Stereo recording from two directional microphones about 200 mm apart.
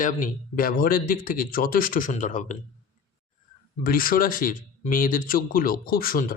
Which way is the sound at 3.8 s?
45° left (ahead or behind).